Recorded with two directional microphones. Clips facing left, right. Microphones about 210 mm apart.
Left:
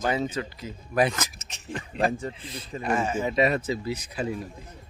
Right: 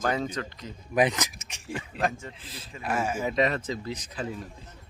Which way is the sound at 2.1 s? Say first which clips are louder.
Left 8 dB; 35° left (ahead or behind).